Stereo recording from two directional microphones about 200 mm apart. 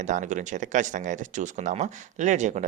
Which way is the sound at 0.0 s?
40° right (ahead or behind).